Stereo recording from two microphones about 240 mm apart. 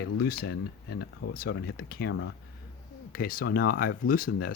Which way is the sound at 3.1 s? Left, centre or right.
Left.